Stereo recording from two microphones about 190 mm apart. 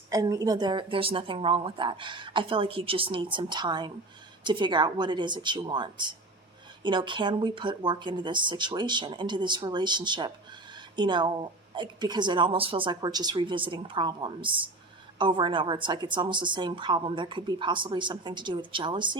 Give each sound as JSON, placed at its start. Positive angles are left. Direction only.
{"t": 0.1, "sound": "a woman's voice", "side_deg": -20}